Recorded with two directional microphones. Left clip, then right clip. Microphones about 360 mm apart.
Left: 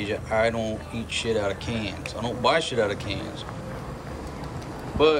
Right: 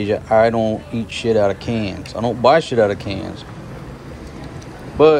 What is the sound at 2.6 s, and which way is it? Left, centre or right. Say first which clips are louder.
Speech: right 9 dB; left.